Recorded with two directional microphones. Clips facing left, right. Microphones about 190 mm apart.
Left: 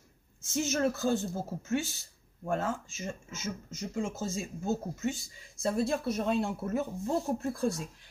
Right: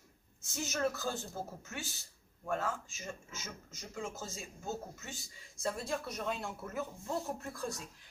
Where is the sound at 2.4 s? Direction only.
25° left (ahead or behind).